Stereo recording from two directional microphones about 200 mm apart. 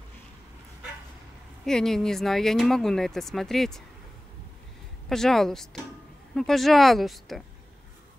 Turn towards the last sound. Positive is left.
turn(degrees=0)  # may be behind; listen again after turning